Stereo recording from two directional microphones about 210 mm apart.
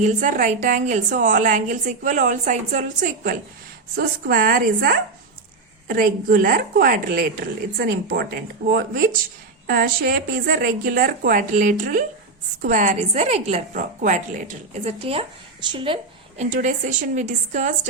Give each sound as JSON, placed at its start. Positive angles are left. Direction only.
{"t": 0.0, "sound": "a woman's voice", "side_deg": -35}
{"t": 16.4, "sound": "a woman's voice", "side_deg": -35}